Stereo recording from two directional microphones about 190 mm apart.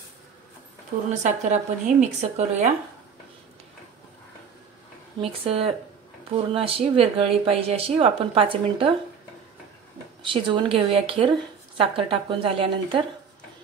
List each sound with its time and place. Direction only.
1.2 s speech: 35° right (ahead or behind)
5.2 s a woman's voice: 30° right (ahead or behind)
10.2 s a woman's voice: 25° right (ahead or behind)